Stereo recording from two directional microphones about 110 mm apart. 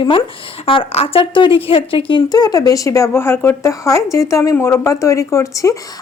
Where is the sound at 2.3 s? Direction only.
35° left (ahead or behind).